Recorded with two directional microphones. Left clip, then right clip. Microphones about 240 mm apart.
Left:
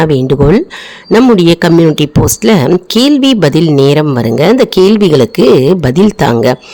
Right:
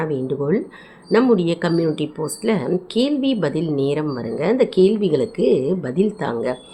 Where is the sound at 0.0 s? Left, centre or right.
Left.